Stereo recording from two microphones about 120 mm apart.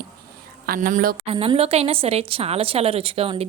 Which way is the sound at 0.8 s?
90° right.